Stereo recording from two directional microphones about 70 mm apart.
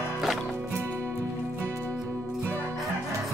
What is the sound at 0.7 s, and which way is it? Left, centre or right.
Music, right.